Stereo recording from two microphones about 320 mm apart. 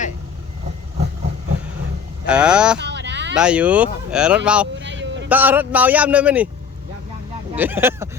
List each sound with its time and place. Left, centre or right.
0.9 s vehicle: right
2.2 s a man's voice: centre
2.7 s a sound: right
3.3 s a man's voice: centre
4.7 s vehicle: right
5.3 s a man's voice: centre
7.5 s speech: centre